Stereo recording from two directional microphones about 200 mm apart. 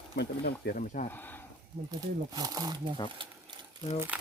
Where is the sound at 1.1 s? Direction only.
10° left (ahead or behind).